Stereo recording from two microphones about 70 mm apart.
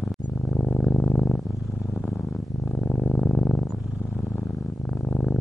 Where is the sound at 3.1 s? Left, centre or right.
Centre.